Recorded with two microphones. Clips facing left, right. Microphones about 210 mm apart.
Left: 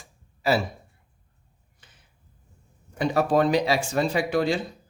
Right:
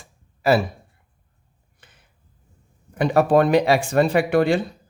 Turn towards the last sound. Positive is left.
turn(degrees=-60)  # may be behind; listen again after turning